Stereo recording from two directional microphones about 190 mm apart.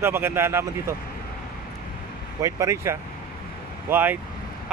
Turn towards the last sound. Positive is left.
turn(degrees=-10)  # may be behind; listen again after turning